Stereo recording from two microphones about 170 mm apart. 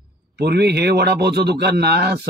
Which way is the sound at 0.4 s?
70° right (ahead or behind).